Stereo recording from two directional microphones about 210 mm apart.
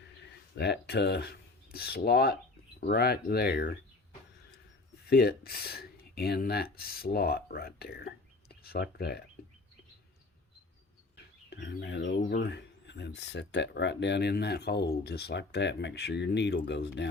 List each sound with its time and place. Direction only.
0.6 s filing: 55° left (ahead or behind)
2.8 s speech: 50° left (ahead or behind)
5.0 s speech: 50° left (ahead or behind)
11.4 s speech: 55° left (ahead or behind)